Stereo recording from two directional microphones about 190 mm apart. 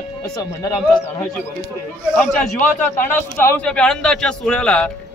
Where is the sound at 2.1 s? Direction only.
10° left (ahead or behind).